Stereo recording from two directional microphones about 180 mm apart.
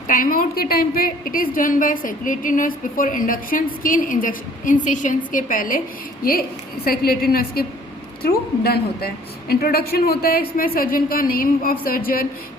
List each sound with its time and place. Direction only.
0.1 s a woman's voice: 50° left (ahead or behind)
6.8 s a man's voice: 55° left (ahead or behind)